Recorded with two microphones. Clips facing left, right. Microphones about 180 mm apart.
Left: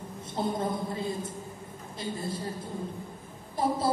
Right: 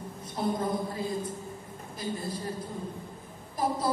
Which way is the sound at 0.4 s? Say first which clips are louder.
Even; 25° left (ahead or behind).